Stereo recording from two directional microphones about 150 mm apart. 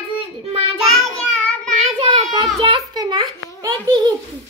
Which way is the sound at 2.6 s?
30° right (ahead or behind).